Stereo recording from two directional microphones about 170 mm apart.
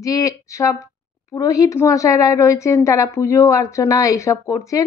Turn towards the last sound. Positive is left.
turn(degrees=20)  # may be behind; listen again after turning